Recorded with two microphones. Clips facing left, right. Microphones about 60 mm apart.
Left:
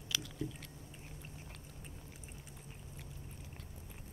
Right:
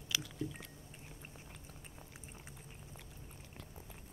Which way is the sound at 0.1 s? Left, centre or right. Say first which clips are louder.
Right 1 dB; centre.